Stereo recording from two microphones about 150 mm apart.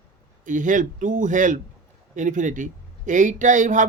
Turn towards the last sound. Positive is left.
turn(degrees=-55)  # may be behind; listen again after turning